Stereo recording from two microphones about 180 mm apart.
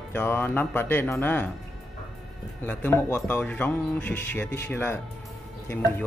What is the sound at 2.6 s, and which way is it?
Speech, 10° left (ahead or behind).